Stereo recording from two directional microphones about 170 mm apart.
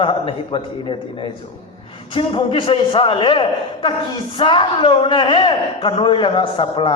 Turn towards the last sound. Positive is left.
turn(degrees=30)  # may be behind; listen again after turning